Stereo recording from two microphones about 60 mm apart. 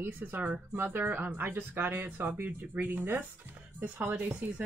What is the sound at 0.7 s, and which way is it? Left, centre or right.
Speech, right.